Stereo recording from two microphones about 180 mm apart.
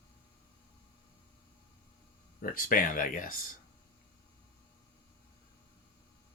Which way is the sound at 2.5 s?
50° left (ahead or behind).